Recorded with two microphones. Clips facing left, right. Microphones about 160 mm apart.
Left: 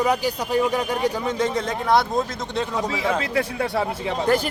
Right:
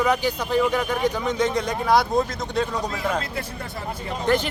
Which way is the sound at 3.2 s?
85° left.